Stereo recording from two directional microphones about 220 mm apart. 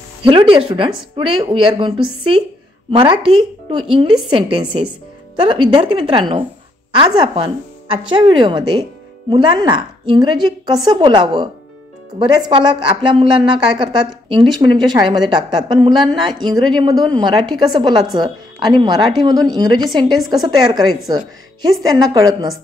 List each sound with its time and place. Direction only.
0.2 s a woman's voice: 25° right (ahead or behind)